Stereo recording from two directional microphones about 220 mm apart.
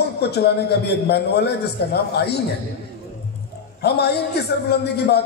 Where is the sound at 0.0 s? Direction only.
50° left (ahead or behind).